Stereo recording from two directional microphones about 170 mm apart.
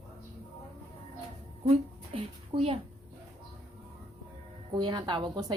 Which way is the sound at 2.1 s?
35° right (ahead or behind).